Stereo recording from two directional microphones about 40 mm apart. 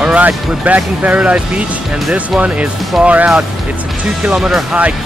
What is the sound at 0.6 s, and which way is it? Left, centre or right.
Speech, right.